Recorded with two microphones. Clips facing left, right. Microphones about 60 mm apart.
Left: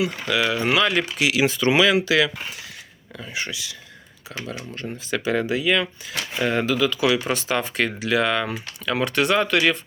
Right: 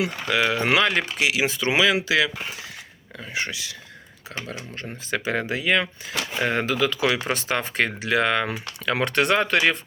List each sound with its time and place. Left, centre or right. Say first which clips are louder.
0.0 s speech: even; right
0.6 s speech: even; right
0.9 s speech: left 1 dB; right
1.3 s speech: left 3 dB; centre
3.2 s speech: right 1 dB; right